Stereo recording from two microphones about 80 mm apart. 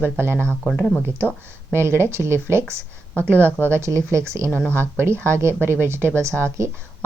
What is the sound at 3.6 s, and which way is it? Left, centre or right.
Speech, right.